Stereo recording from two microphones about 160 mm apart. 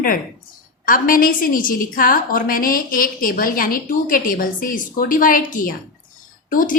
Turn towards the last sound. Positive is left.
turn(degrees=55)  # may be behind; listen again after turning